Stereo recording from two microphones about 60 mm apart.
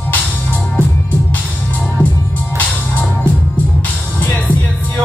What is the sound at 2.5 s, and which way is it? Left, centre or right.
Music, left.